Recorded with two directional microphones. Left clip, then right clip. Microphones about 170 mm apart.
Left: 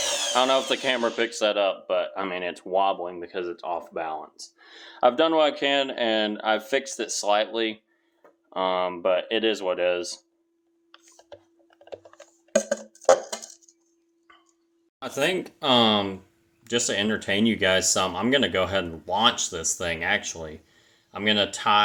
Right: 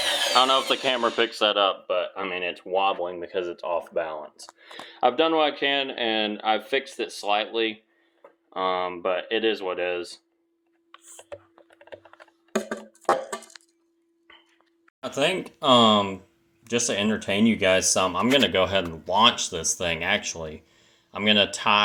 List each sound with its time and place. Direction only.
0.3 s speech: 10° left (ahead or behind)
1.9 s speech: 25° left (ahead or behind)
3.0 s speech: 5° left (ahead or behind); by 10.2 s 25° left (ahead or behind)
15.0 s speech: centre (ahead or behind)
20.7 s a sound: centre (ahead or behind)